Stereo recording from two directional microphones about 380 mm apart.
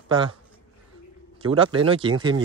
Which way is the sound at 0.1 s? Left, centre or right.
Centre.